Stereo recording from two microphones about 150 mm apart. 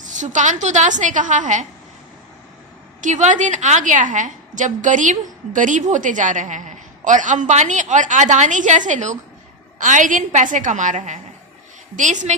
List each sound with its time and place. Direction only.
0.0 s a woman's voice: 55° right (ahead or behind)
3.0 s a woman's voice: 55° right (ahead or behind)